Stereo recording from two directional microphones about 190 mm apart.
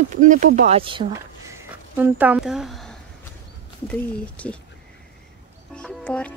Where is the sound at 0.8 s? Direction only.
25° right (ahead or behind).